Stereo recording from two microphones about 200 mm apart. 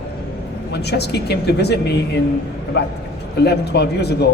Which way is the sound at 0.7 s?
55° left (ahead or behind).